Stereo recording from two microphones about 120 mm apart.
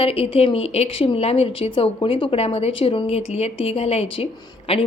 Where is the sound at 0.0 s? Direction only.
55° left (ahead or behind).